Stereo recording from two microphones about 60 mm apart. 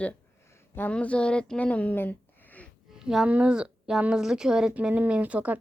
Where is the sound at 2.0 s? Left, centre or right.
Left.